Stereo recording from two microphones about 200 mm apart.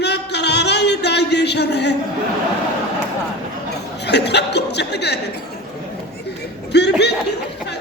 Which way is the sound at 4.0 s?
60° left (ahead or behind).